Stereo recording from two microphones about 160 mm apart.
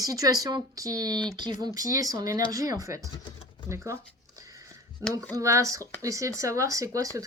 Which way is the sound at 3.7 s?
20° right (ahead or behind).